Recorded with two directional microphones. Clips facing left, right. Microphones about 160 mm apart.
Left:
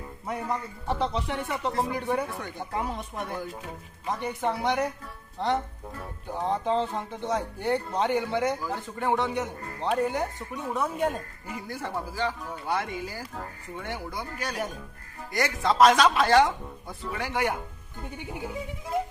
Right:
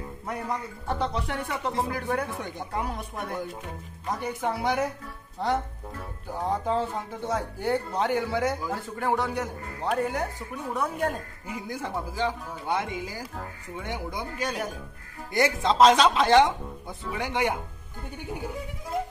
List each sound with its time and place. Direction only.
0.3 s speech: centre (ahead or behind)
6.2 s speech: 5° right (ahead or behind)
11.4 s speech: 15° right (ahead or behind)
18.2 s speech: centre (ahead or behind)